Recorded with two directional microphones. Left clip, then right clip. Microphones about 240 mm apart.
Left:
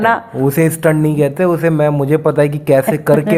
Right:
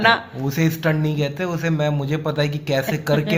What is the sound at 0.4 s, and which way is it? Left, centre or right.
A man's voice, left.